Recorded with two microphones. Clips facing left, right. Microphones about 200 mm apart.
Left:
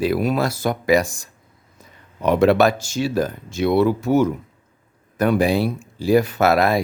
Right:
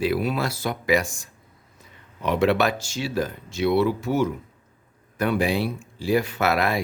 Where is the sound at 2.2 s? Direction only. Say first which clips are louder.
Left 6 dB; 45° left (ahead or behind).